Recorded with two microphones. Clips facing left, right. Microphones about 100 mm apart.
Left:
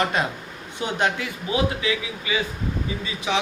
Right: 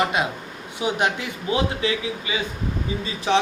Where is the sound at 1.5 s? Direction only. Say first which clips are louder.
Right 1 dB; 30° right (ahead or behind).